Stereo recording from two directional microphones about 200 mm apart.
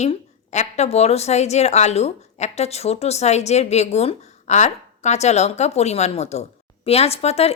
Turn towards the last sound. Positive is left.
turn(degrees=30)  # may be behind; listen again after turning